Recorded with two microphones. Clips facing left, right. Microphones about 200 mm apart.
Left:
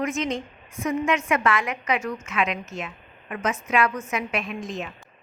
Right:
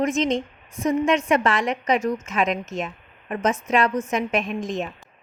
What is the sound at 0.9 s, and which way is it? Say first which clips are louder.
A woman's voice: right 4 dB; 35° right (ahead or behind).